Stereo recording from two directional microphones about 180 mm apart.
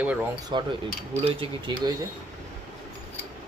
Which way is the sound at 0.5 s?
25° right (ahead or behind).